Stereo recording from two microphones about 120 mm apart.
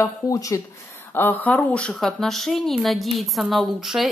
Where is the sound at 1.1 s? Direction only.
15° left (ahead or behind).